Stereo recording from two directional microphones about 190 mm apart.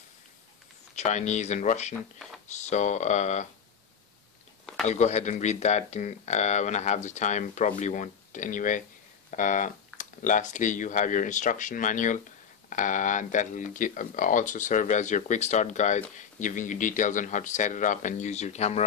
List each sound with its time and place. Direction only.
0.9 s speech: 35° left (ahead or behind)
4.8 s speech: 35° left (ahead or behind)